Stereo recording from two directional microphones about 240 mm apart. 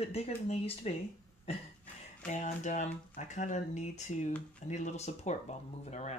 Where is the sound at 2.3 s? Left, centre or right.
Left.